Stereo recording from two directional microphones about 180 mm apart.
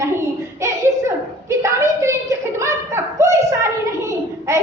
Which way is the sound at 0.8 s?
15° right (ahead or behind).